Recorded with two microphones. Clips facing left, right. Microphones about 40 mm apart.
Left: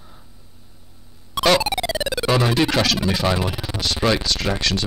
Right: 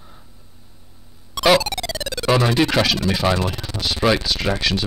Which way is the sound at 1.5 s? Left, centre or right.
Centre.